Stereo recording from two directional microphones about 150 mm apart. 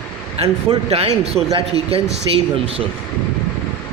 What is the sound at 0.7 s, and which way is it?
Speech, 40° right (ahead or behind).